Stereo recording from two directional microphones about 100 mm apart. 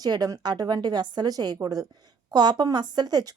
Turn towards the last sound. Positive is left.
turn(degrees=-40)  # may be behind; listen again after turning